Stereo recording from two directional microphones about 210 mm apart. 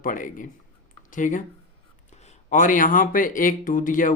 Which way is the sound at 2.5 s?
40° left (ahead or behind).